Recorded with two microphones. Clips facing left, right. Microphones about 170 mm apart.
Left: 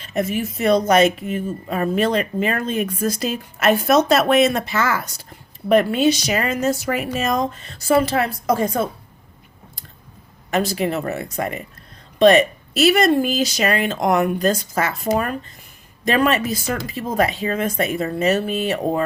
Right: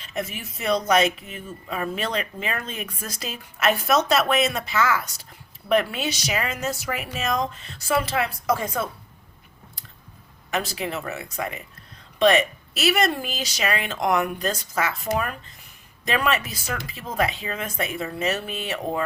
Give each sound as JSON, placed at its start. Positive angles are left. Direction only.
{"t": 0.3, "sound": "speech", "side_deg": 50}
{"t": 10.5, "sound": "speech", "side_deg": 40}